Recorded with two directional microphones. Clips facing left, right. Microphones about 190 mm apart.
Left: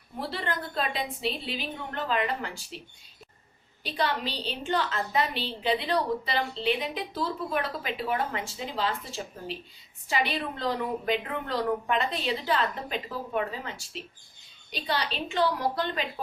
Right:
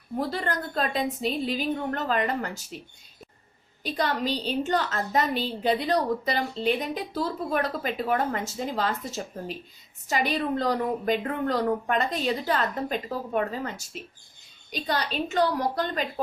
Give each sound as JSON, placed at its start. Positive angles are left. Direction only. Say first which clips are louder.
{"t": 0.2, "sound": "a woman's voice", "louder": "right 4 dB", "side_deg": -45}
{"t": 3.8, "sound": "a woman's voice", "louder": "right 3 dB", "side_deg": -45}